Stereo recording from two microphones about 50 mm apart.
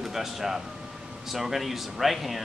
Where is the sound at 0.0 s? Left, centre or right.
Centre.